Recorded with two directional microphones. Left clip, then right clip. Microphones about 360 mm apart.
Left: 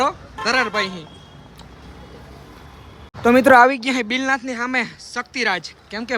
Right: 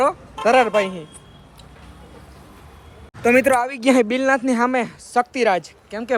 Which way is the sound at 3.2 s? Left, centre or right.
Centre.